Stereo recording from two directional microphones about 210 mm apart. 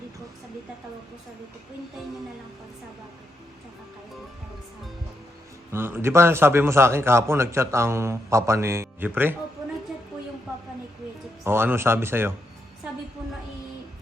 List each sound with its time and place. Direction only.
5.7 s a man's voice: 10° right (ahead or behind)
11.4 s a man's voice: 10° right (ahead or behind)